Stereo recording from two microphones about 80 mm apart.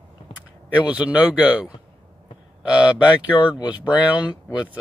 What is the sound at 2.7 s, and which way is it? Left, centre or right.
Speech, centre.